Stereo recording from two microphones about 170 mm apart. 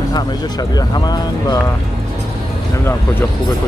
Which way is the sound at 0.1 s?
20° left (ahead or behind).